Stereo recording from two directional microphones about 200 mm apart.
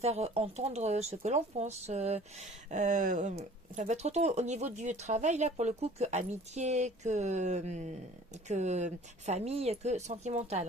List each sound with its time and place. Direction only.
0.0 s speech: 30° right (ahead or behind)